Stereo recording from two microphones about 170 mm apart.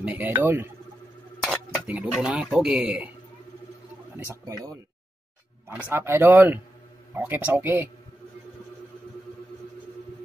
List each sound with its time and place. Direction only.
0.0 s speech: 10° right (ahead or behind)
1.4 s speech: centre (ahead or behind)
4.2 s speech: 15° right (ahead or behind)
5.9 s speech: 15° right (ahead or behind)